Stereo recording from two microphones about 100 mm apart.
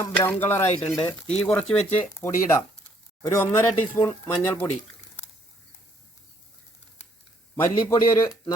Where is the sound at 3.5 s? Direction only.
30° left (ahead or behind).